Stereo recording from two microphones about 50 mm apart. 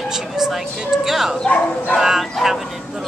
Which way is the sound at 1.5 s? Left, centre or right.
Left.